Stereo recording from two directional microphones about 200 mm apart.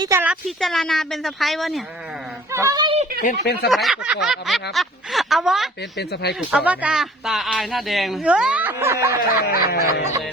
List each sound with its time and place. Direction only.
0.0 s speech: 10° right (ahead or behind)
2.5 s speech: 15° right (ahead or behind)
3.4 s snicker: 50° left (ahead or behind)
3.7 s speech: centre (ahead or behind)
6.0 s speech: 55° left (ahead or behind)
6.5 s speech: 5° right (ahead or behind)
9.4 s snicker: 50° left (ahead or behind)